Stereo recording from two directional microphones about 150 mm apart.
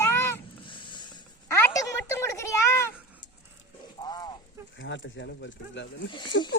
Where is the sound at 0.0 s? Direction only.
15° left (ahead or behind).